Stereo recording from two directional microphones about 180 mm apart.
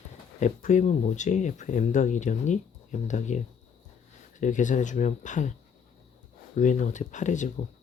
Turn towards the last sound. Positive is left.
turn(degrees=45)  # may be behind; listen again after turning